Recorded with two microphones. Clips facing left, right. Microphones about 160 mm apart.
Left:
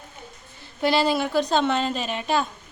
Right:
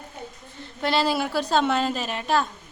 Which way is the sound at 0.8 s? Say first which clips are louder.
Left 2 dB; centre (ahead or behind).